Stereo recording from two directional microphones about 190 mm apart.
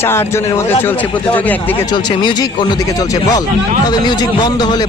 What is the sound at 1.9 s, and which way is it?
Speech, 25° left (ahead or behind).